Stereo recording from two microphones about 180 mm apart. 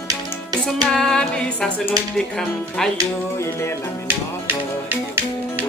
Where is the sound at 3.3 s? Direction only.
15° left (ahead or behind).